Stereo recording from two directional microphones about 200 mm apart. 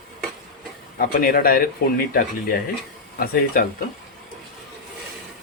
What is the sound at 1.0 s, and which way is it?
Speech, 45° left (ahead or behind).